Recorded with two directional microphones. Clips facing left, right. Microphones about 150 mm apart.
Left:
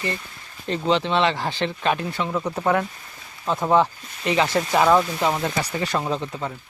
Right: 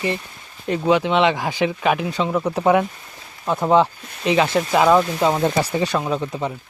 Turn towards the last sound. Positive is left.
turn(degrees=-15)  # may be behind; listen again after turning